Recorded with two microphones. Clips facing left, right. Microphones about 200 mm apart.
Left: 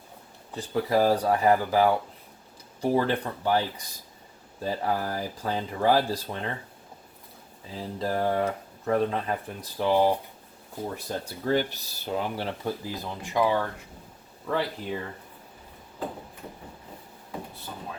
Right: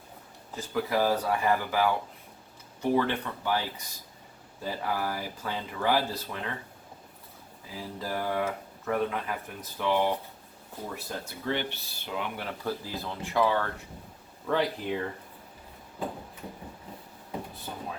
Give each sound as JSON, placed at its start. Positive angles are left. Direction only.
{"t": 0.5, "sound": "speech", "side_deg": 35}
{"t": 4.6, "sound": "speech", "side_deg": 35}
{"t": 7.8, "sound": "speech", "side_deg": 35}
{"t": 12.6, "sound": "speech", "side_deg": 15}
{"t": 14.4, "sound": "speech", "side_deg": 0}